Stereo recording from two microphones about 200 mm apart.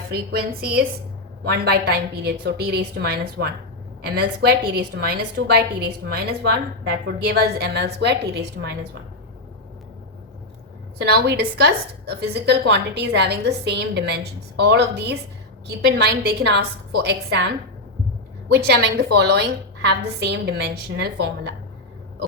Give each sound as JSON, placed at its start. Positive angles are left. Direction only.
{"t": 0.1, "sound": "a woman's voice", "side_deg": -50}
{"t": 11.0, "sound": "a woman's voice", "side_deg": -55}
{"t": 18.5, "sound": "a woman's voice", "side_deg": -55}